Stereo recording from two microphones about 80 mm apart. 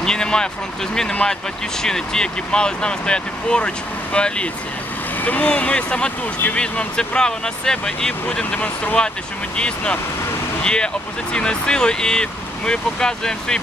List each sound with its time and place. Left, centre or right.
0.0 s speech: centre
8.5 s speech: left